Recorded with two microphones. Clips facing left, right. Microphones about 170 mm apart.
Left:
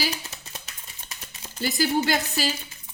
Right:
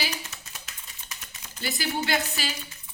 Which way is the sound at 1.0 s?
35° left (ahead or behind).